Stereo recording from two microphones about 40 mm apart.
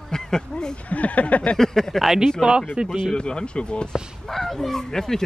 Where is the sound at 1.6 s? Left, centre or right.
Centre.